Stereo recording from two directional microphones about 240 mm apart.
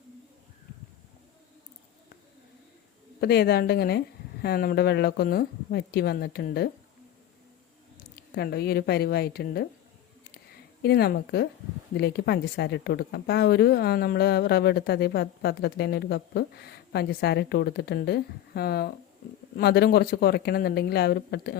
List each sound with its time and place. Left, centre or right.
3.2 s speech: left
7.9 s speech: left
10.8 s a woman's voice: left